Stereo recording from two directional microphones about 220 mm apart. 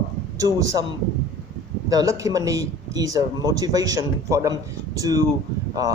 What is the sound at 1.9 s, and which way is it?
Speech, 15° right (ahead or behind).